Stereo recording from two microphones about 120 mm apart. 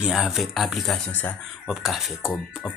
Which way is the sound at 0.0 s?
5° right (ahead or behind).